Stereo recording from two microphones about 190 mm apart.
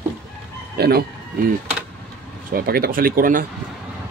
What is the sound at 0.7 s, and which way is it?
Speech, 55° right (ahead or behind).